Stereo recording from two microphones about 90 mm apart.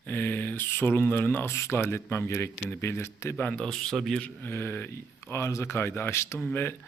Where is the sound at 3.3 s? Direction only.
15° left (ahead or behind).